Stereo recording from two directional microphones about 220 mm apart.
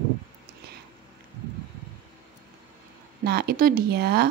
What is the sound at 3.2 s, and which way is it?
A woman's voice, 45° right (ahead or behind).